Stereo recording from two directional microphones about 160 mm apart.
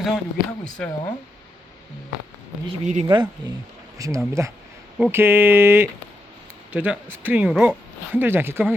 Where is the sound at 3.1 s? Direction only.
25° right (ahead or behind).